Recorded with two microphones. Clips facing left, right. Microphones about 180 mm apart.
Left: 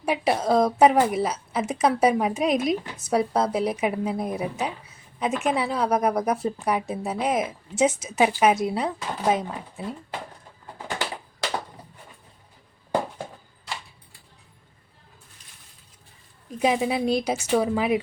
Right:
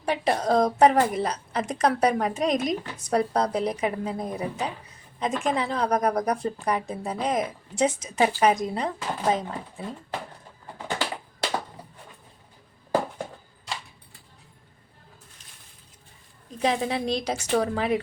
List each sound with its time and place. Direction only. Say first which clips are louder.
0.0 s a woman's voice: left 1 dB; 10° left (ahead or behind)
16.6 s a woman's voice: left 3 dB; 10° left (ahead or behind)